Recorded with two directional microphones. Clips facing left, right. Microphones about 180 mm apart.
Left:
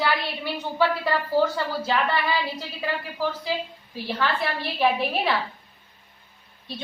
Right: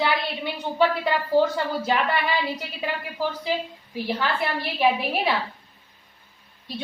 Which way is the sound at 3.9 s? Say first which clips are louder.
Right 2 dB; 15° right (ahead or behind).